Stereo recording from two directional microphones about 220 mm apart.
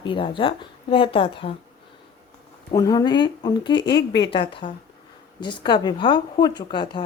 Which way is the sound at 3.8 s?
50° left (ahead or behind).